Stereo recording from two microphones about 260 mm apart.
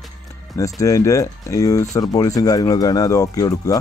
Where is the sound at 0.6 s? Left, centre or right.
Centre.